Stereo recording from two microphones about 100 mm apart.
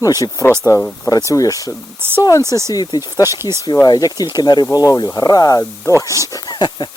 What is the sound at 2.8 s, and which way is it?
Speech, 50° left (ahead or behind).